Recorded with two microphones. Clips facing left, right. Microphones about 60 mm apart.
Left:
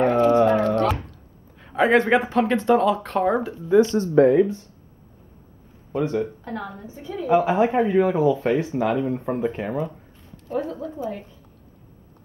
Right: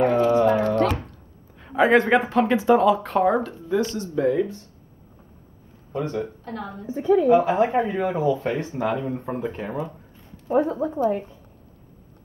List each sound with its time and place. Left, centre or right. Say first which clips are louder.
0.0 s a sound: left 1 dB; centre
1.6 s speech: right 1 dB; centre
3.4 s speech: left 6 dB; centre
5.9 s speech: left 3 dB; centre
6.9 s a woman's voice: right 17 dB; right
7.2 s speech: right 1 dB; centre
10.5 s speech: right 6 dB; right